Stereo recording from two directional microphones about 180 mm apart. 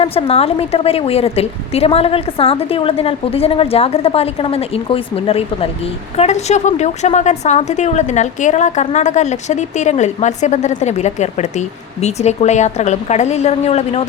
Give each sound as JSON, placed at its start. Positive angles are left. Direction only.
{"t": 0.0, "sound": "a woman's voice", "side_deg": 30}